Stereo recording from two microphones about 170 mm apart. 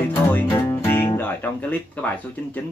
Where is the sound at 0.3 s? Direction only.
10° left (ahead or behind).